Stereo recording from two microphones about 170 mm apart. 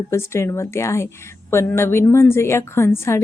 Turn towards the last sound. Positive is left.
turn(degrees=15)  # may be behind; listen again after turning